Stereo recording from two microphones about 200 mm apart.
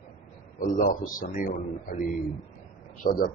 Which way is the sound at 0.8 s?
45° left (ahead or behind).